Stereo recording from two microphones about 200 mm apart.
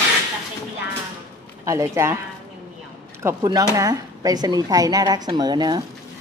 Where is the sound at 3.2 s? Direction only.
15° right (ahead or behind).